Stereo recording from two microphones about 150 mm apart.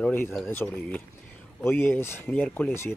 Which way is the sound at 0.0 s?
10° left (ahead or behind).